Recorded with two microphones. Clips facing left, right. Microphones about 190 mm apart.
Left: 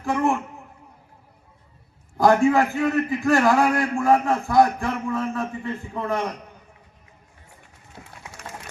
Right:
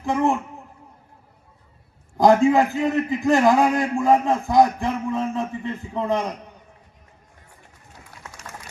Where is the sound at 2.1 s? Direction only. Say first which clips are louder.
Right 2 dB; 15° right (ahead or behind).